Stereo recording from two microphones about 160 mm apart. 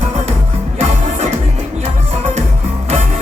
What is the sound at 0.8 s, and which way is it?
Music, 45° right (ahead or behind).